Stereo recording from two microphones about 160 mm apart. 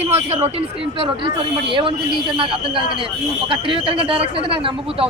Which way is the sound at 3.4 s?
30° right (ahead or behind).